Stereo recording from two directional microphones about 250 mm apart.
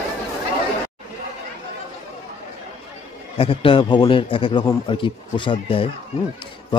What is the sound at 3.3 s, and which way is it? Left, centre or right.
Speech, left.